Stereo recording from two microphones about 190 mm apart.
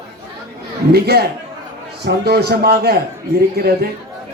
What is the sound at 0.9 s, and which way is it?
A man's voice, 55° right (ahead or behind).